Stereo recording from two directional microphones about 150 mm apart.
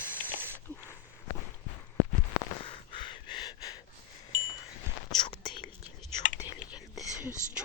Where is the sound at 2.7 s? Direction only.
35° left (ahead or behind).